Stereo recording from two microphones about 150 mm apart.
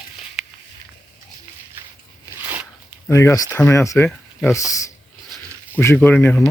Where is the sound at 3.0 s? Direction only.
20° left (ahead or behind).